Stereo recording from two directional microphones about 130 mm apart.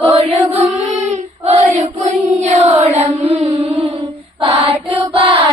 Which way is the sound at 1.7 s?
60° right (ahead or behind).